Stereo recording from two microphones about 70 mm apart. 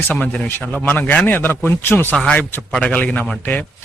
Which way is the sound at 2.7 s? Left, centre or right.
Centre.